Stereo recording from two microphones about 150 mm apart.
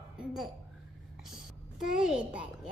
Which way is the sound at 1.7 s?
Centre (ahead or behind).